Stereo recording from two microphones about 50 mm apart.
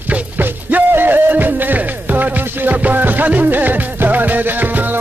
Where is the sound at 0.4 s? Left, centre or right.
Right.